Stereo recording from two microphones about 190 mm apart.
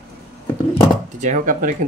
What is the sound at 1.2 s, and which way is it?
Speech, 40° right (ahead or behind).